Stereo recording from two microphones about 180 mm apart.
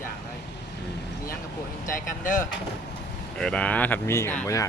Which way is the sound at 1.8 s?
50° left (ahead or behind).